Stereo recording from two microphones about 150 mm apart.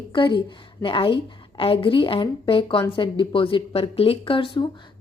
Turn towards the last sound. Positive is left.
turn(degrees=35)  # may be behind; listen again after turning